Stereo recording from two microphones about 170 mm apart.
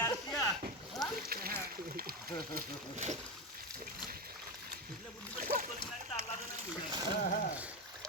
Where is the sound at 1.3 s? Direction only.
60° right (ahead or behind).